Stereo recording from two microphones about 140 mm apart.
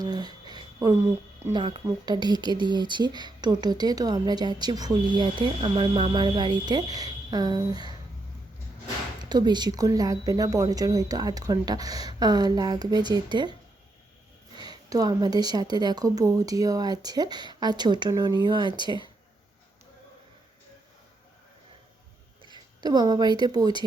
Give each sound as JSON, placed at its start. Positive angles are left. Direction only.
{"t": 0.0, "sound": "a sound", "side_deg": -30}
{"t": 1.5, "sound": "speech", "side_deg": -30}
{"t": 9.3, "sound": "speech", "side_deg": -30}
{"t": 22.8, "sound": "speech", "side_deg": -30}